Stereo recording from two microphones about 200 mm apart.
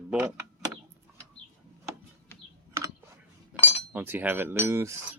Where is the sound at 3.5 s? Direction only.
5° right (ahead or behind).